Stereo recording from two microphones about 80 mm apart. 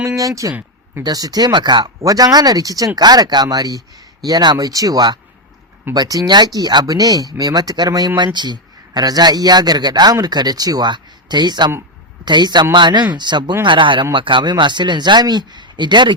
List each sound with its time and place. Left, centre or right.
0.2 s speech: right
2.0 s a man's voice: right
13.7 s a man's voice: right